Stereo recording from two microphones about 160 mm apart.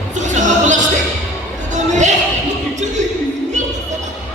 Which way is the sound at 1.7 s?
50° right (ahead or behind).